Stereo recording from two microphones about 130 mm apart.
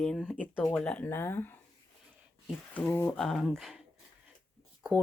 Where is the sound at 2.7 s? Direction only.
15° left (ahead or behind).